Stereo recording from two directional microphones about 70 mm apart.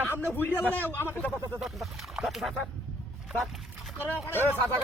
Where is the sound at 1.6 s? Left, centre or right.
Centre.